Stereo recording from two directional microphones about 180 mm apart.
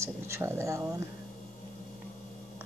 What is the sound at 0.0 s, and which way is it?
Speech, 15° right (ahead or behind).